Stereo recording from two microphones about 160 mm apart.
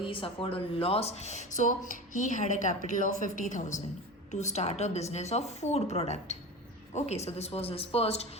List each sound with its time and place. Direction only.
0.0 s speech: 35° left (ahead or behind)